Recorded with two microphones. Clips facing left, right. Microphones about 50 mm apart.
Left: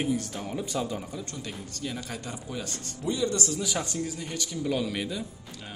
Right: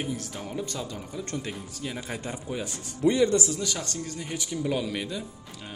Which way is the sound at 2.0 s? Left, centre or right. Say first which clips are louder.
Right 2 dB; right.